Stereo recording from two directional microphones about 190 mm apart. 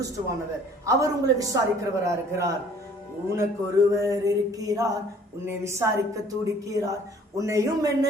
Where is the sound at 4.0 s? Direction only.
15° right (ahead or behind).